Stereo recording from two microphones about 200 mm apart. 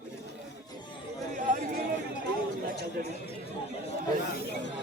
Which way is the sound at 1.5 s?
40° right (ahead or behind).